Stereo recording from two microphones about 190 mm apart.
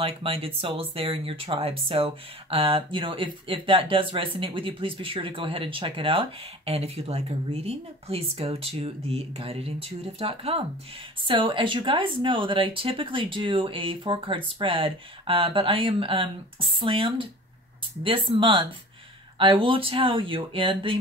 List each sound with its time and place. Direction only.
0.0 s speech: 30° right (ahead or behind)